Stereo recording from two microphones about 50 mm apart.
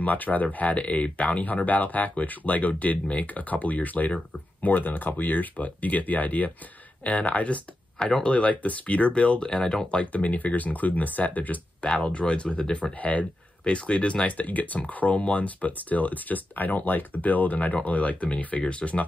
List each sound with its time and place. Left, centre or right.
0.0 s speech: left
11.8 s speech: left